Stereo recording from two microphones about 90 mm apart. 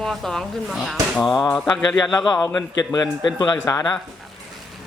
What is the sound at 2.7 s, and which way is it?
Speech, 40° left (ahead or behind).